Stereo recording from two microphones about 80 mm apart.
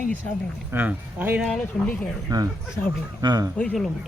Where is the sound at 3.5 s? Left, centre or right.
Centre.